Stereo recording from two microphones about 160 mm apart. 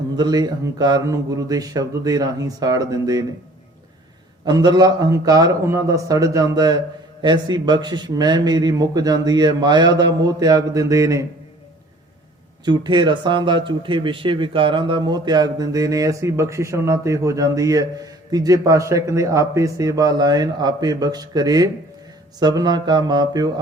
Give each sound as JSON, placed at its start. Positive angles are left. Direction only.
{"t": 0.2, "sound": "speech", "side_deg": -25}
{"t": 4.4, "sound": "speech", "side_deg": -25}
{"t": 12.6, "sound": "speech", "side_deg": -25}